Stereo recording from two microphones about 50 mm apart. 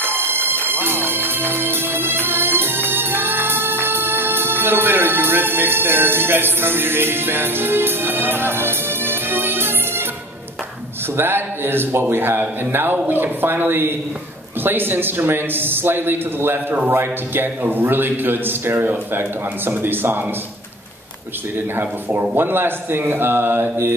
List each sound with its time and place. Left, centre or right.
0.0 s a sound: right
1.0 s music: right
11.1 s a man's voice: right
22.3 s a man's voice: right